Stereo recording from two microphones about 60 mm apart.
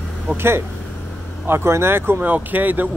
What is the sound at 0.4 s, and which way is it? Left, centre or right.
Speech, right.